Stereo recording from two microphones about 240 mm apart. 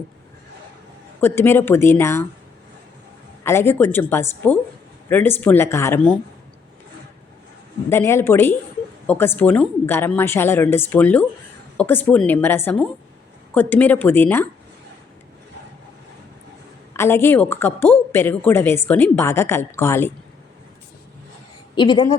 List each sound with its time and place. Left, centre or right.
1.2 s a woman's voice: centre
3.4 s a woman's voice: centre
7.9 s a woman's voice: centre
16.9 s a woman's voice: centre
21.8 s a woman's voice: centre